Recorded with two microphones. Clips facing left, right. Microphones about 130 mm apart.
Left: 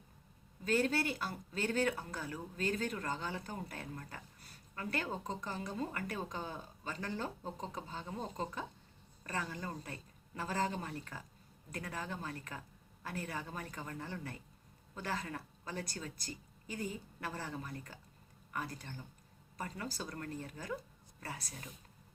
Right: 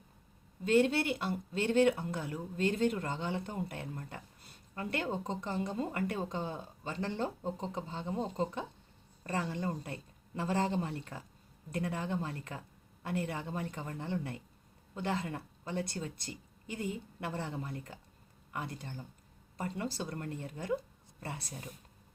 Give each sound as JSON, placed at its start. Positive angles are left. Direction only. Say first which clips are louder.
{"t": 0.6, "sound": "speech", "louder": "right 5 dB", "side_deg": -25}